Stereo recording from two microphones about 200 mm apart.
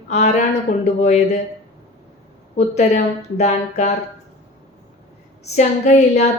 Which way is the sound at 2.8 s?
35° left (ahead or behind).